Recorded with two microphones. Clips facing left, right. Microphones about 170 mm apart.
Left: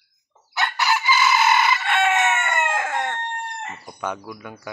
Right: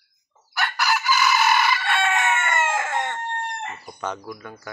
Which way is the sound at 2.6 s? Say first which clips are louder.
Even; 5° right (ahead or behind).